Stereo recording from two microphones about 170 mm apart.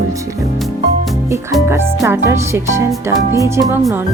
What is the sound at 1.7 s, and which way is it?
Speech, 15° right (ahead or behind).